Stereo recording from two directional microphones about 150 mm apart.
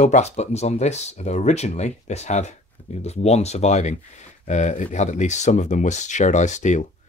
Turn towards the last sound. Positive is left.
turn(degrees=55)  # may be behind; listen again after turning